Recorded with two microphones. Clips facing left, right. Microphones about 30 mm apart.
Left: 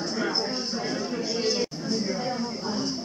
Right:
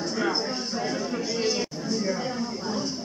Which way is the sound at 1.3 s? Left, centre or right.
Centre.